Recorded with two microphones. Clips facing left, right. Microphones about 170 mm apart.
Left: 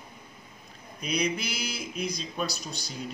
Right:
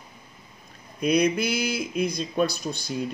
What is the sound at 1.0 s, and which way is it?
Speech, 55° right (ahead or behind).